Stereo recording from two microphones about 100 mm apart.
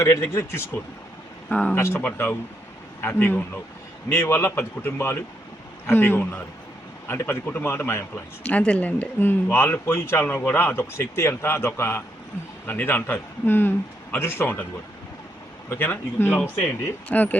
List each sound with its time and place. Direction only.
0.0 s speech: 30° left (ahead or behind)
1.5 s speech: 10° left (ahead or behind)
1.7 s speech: 25° left (ahead or behind)
8.4 s speech: 15° left (ahead or behind)
15.7 s speech: 20° left (ahead or behind)